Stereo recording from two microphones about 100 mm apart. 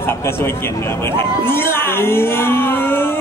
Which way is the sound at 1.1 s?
25° left (ahead or behind).